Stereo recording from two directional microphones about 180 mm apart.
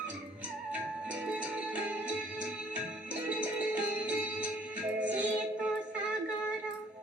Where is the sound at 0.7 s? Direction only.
5° right (ahead or behind).